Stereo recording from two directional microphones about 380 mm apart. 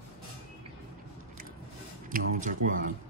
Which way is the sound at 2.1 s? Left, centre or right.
Right.